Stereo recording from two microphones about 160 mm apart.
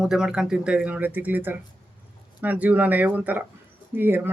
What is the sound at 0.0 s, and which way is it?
Speech, 5° right (ahead or behind).